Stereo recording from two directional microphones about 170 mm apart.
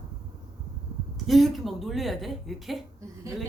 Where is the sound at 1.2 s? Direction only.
Centre (ahead or behind).